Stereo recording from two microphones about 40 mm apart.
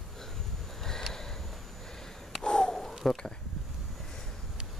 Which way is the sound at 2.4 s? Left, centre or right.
Centre.